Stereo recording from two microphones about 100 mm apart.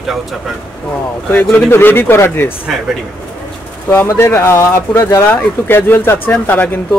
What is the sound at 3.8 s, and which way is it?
Speech, 25° left (ahead or behind).